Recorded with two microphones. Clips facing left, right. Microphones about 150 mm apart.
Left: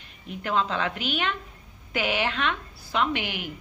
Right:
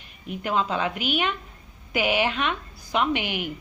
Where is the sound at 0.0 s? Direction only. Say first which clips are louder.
Right 3 dB; 15° right (ahead or behind).